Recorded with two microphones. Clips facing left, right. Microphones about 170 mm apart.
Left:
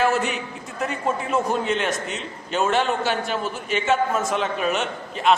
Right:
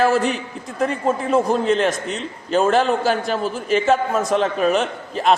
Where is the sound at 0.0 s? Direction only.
35° right (ahead or behind).